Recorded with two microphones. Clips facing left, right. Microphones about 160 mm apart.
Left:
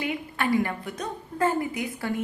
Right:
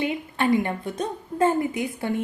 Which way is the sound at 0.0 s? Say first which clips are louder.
Right 4 dB; 25° right (ahead or behind).